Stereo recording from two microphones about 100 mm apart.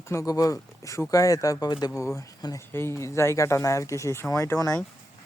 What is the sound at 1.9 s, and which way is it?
Speech, 30° left (ahead or behind).